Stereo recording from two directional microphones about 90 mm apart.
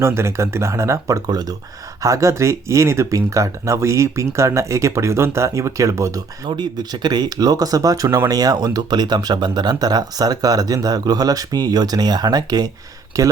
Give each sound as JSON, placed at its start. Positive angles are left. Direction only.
{"t": 0.0, "sound": "speech", "side_deg": -30}